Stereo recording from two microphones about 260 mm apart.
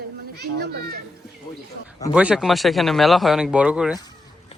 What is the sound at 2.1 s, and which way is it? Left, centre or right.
Speech, centre.